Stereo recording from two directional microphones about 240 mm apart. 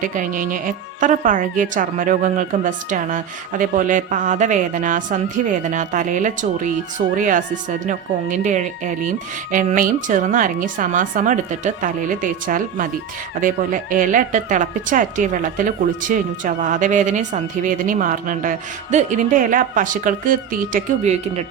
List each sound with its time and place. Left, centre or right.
0.0 s speech: right